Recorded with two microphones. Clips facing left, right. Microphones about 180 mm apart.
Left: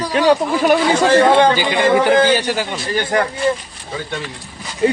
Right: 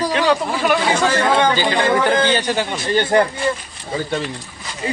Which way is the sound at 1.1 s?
30° left (ahead or behind).